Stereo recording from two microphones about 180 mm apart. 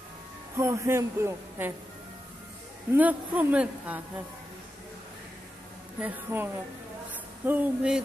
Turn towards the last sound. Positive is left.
turn(degrees=-5)  # may be behind; listen again after turning